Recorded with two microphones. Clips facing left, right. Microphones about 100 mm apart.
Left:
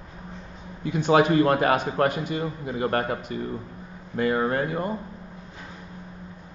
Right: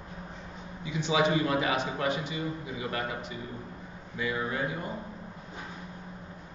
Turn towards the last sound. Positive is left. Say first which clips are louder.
# left 7 dB
turn(degrees=55)  # may be behind; listen again after turning